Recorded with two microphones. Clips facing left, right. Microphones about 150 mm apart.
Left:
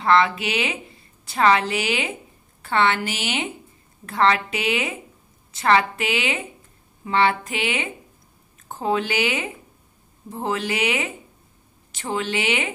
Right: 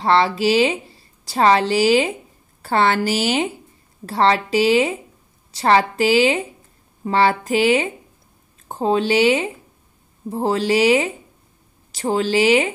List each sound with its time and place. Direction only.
0.0 s a woman's voice: 30° right (ahead or behind)